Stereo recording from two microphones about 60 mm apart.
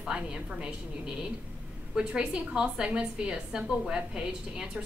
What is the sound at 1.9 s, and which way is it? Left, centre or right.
A woman's voice, centre.